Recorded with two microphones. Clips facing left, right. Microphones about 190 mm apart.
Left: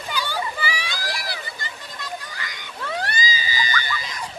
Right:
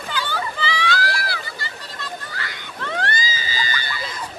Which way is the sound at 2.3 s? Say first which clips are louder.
Right 2 dB; 15° left (ahead or behind).